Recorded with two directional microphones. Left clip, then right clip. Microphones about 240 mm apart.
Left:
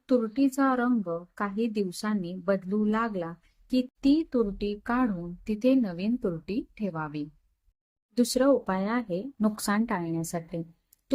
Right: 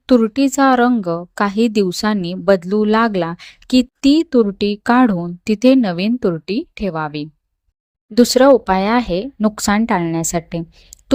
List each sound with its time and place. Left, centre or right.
0.0 s speech: right